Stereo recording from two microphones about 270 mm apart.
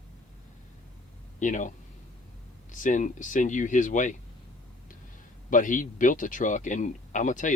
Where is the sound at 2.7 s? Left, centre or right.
Left.